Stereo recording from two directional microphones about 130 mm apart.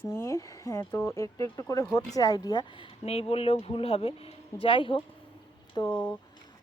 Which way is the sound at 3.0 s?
50° left (ahead or behind).